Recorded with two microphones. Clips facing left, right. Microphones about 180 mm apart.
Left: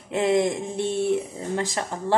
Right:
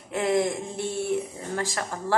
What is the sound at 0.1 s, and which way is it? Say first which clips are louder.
Speech: left 3 dB; 20° left (ahead or behind).